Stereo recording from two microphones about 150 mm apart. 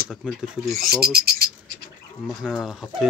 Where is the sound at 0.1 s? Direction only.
Centre (ahead or behind).